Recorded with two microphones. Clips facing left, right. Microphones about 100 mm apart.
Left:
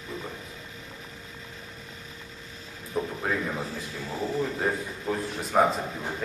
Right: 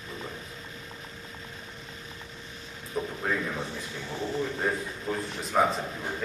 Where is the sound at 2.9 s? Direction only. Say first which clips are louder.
Left 1 dB; 10° left (ahead or behind).